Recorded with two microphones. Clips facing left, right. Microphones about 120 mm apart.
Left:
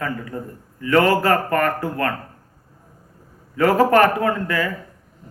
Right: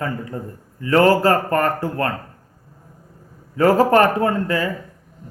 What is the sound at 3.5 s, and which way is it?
Speech, 30° right (ahead or behind).